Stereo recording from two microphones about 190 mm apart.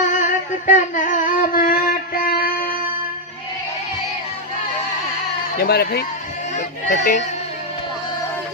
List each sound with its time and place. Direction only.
0.0 s humming: 40° left (ahead or behind)
5.5 s speech: 55° left (ahead or behind)
6.8 s a sound: 45° left (ahead or behind)